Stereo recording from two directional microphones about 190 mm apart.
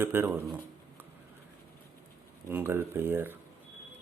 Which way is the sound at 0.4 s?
10° right (ahead or behind).